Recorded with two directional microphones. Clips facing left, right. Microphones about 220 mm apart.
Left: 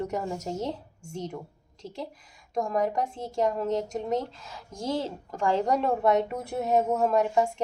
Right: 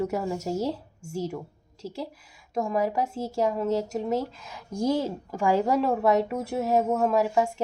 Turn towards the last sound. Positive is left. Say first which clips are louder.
# right 1 dB
turn(degrees=-5)  # may be behind; listen again after turning